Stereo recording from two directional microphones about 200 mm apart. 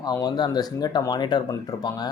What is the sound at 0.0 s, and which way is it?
Speech, 20° left (ahead or behind).